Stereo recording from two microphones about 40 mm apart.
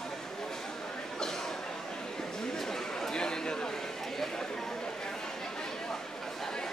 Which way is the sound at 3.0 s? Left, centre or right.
Centre.